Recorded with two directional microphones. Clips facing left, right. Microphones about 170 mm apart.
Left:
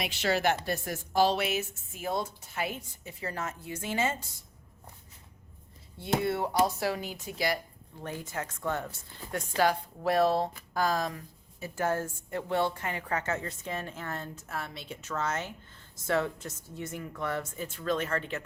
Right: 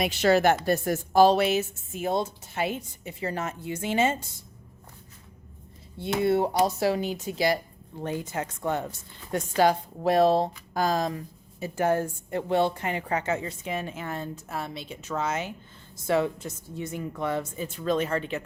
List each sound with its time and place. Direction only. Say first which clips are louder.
0.0 s a woman's voice: right 7 dB; 45° right (ahead or behind); by 4.2 s 20° right (ahead or behind)
6.0 s a woman's voice: right 6 dB; 25° right (ahead or behind)